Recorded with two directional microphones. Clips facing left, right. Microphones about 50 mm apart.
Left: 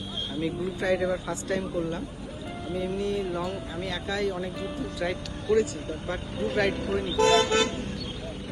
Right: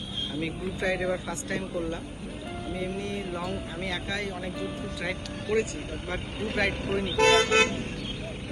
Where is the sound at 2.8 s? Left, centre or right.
Right.